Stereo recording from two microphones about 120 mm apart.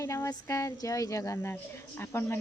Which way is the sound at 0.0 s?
25° left (ahead or behind).